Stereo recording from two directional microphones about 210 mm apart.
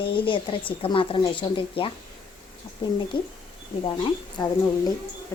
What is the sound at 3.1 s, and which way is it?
Speech, 20° left (ahead or behind).